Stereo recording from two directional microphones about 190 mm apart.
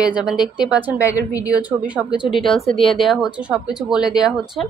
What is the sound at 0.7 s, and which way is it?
Speech, 10° right (ahead or behind).